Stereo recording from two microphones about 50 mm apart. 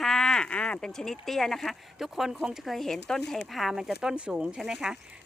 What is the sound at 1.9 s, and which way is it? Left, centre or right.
Speech, centre.